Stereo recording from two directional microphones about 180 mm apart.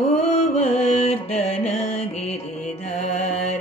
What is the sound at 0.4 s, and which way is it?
Music, 35° left (ahead or behind).